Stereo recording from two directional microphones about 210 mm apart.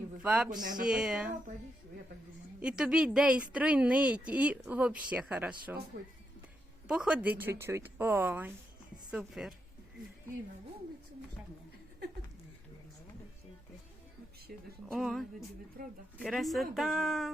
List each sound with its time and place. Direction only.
0.2 s a woman's voice: 5° right (ahead or behind)
0.6 s speech: 40° right (ahead or behind)
0.9 s a woman's voice: 5° right (ahead or behind)
2.6 s a woman's voice: 5° right (ahead or behind)
6.8 s a woman's voice: 5° right (ahead or behind)
14.5 s speech: 50° right (ahead or behind)
14.8 s a woman's voice: centre (ahead or behind)
15.8 s speech: 50° right (ahead or behind)
16.2 s a woman's voice: centre (ahead or behind)